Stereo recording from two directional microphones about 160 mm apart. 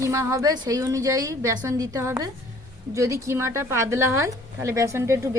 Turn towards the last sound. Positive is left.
turn(degrees=-20)  # may be behind; listen again after turning